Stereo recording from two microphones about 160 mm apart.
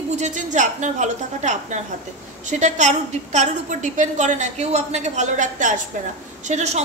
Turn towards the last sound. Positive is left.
turn(degrees=-45)  # may be behind; listen again after turning